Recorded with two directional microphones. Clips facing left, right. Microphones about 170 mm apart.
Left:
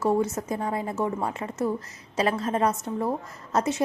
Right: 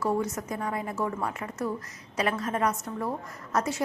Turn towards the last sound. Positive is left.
turn(degrees=25)  # may be behind; listen again after turning